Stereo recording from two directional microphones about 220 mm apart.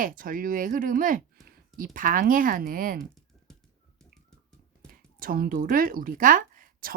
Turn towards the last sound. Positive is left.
turn(degrees=-40)  # may be behind; listen again after turning